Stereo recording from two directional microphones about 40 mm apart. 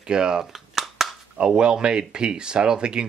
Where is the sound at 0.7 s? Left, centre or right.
Centre.